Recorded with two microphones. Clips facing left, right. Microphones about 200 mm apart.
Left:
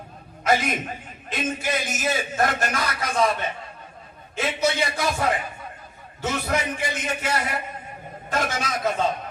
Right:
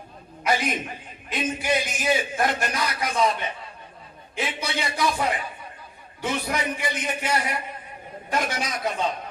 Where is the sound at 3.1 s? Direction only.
50° left (ahead or behind).